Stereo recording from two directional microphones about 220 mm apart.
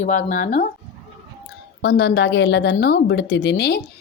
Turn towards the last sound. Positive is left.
turn(degrees=50)  # may be behind; listen again after turning